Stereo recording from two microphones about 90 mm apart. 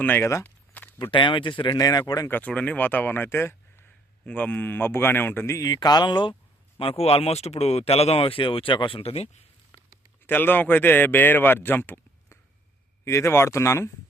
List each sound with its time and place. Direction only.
0.0 s speech: 20° left (ahead or behind)
0.4 s a sound: 20° left (ahead or behind)
1.1 s speech: 65° left (ahead or behind)
1.8 s speech: 45° left (ahead or behind)
2.2 s speech: 20° left (ahead or behind)
4.3 s speech: 15° left (ahead or behind)
5.5 s speech: 45° left (ahead or behind)
6.7 s speech: 90° left; by 9.0 s 70° left (ahead or behind)
10.2 s speech: 20° left (ahead or behind)